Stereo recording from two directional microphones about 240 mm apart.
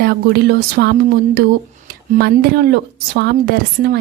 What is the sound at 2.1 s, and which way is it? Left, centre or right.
A woman's voice, right.